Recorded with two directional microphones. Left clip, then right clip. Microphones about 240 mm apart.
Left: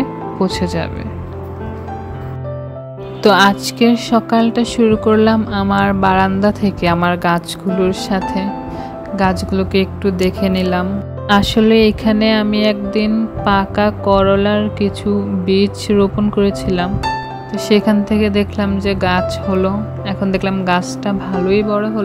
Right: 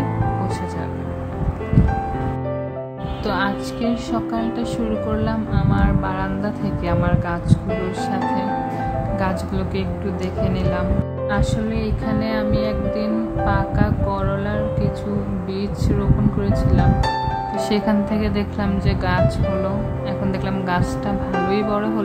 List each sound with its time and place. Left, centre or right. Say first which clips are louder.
3.3 s speech: left 12 dB; left; by 22.0 s centre